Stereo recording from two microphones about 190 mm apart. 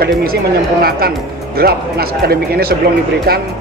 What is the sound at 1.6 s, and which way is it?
Speech, 55° right (ahead or behind).